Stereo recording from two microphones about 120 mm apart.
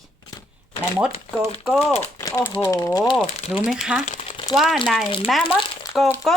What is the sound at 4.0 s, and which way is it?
Speech, 85° left.